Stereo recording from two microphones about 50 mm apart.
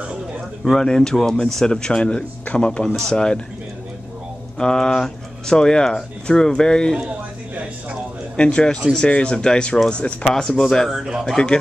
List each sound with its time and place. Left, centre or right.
0.7 s speech: centre
4.6 s speech: centre
8.4 s speech: centre
10.9 s a man's voice: centre
11.2 s speech: centre